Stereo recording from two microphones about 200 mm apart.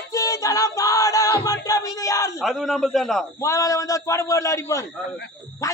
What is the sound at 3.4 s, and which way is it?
A man's voice, 15° left (ahead or behind).